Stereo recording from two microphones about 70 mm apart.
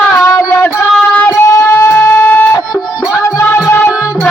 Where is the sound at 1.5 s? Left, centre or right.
Left.